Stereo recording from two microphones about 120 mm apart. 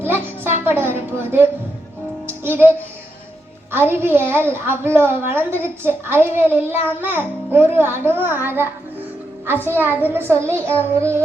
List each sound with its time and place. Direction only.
0.0 s a sound: 20° right (ahead or behind)
2.2 s music: 20° right (ahead or behind)
3.7 s a woman's voice: 20° right (ahead or behind)
9.6 s a child's voice: 15° right (ahead or behind)